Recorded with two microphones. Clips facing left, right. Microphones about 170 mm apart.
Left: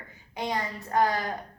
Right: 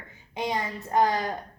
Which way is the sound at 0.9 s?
20° right (ahead or behind).